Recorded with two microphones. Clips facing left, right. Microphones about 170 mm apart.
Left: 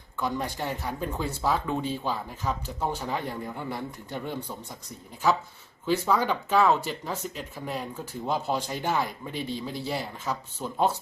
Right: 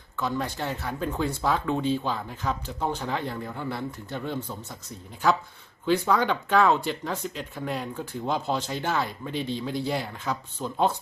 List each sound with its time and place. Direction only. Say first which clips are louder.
0.2 s speech: right 1 dB; 15° left (ahead or behind)
5.8 s speech: right 2 dB; 10° left (ahead or behind)